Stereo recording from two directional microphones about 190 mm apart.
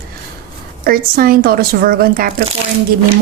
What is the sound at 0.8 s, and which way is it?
Speech, 50° right (ahead or behind).